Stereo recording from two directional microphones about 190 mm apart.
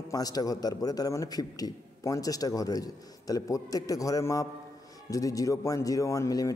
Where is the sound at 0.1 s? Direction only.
20° left (ahead or behind).